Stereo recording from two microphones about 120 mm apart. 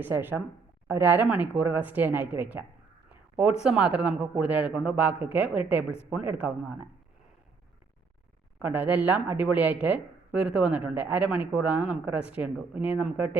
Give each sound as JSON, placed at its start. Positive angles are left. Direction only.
{"t": 0.0, "sound": "speech", "side_deg": -15}
{"t": 8.5, "sound": "speech", "side_deg": -15}